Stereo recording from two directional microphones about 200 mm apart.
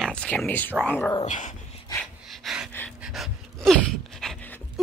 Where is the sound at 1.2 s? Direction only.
40° left (ahead or behind).